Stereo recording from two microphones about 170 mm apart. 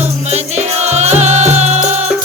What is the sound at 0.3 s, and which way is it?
Music, 40° right (ahead or behind).